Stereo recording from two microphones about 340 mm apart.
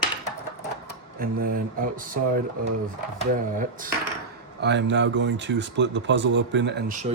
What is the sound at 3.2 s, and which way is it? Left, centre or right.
Speech, right.